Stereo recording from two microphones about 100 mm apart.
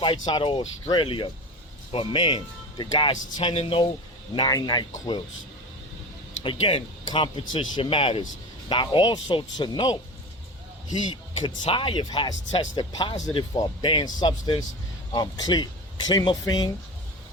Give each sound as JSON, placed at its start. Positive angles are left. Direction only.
{"t": 0.0, "sound": "speech", "side_deg": 50}
{"t": 3.5, "sound": "speech", "side_deg": 80}
{"t": 4.4, "sound": "speech", "side_deg": 45}
{"t": 6.4, "sound": "speech", "side_deg": 60}
{"t": 8.7, "sound": "speech", "side_deg": 55}
{"t": 11.6, "sound": "speech", "side_deg": 55}